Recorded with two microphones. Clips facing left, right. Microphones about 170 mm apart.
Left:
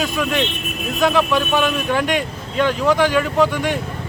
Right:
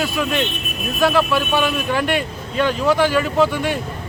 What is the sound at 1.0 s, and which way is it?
Speech, 5° right (ahead or behind).